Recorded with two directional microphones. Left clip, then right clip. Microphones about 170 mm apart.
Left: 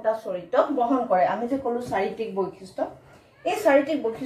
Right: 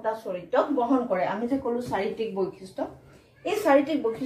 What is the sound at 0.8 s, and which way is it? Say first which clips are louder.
A woman's voice: left 4 dB; 15° right (ahead or behind).